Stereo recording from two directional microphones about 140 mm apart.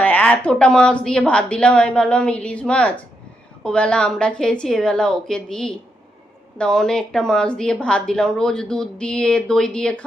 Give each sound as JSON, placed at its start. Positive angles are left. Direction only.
{"t": 0.0, "sound": "a woman's voice", "side_deg": 10}